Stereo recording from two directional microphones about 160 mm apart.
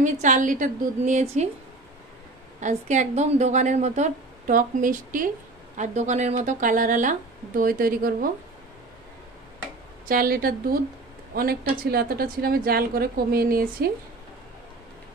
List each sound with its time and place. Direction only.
0.0 s speech: 50° right (ahead or behind)
2.6 s speech: 45° right (ahead or behind)
5.8 s speech: 45° right (ahead or behind)
10.0 s a woman's voice: 65° right (ahead or behind)